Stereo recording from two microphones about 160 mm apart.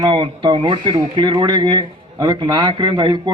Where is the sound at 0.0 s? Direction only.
30° right (ahead or behind).